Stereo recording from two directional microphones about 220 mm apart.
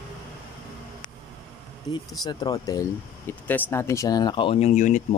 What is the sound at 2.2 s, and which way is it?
Speech, 15° left (ahead or behind).